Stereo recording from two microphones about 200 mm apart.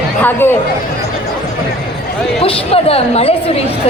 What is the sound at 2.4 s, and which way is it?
Chatter, 30° left (ahead or behind).